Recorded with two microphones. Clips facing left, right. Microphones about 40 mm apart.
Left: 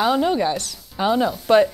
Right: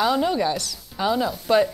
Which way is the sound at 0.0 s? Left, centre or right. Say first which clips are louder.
Left 2 dB; left.